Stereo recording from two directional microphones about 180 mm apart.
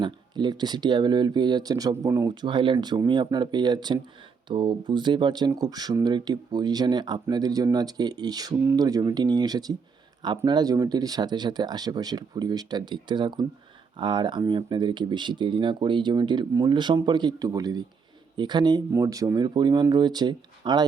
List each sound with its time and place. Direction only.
0.0 s speech: 25° right (ahead or behind)